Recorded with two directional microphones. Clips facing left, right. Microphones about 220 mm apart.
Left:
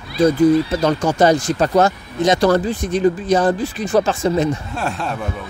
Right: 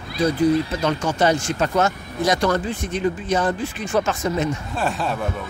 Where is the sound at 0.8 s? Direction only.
40° left (ahead or behind).